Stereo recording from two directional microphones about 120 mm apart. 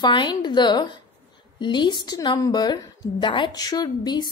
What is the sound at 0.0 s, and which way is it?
A woman's voice, 40° left (ahead or behind).